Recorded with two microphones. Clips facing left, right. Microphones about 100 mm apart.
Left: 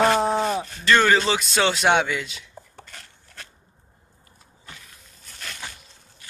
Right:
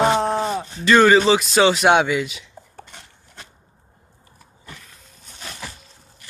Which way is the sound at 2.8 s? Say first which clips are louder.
Right 2 dB; 20° right (ahead or behind).